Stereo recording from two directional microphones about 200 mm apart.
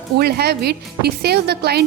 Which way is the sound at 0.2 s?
55° right (ahead or behind).